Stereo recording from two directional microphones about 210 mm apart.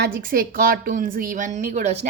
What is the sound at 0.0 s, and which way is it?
A woman's voice, 45° right (ahead or behind).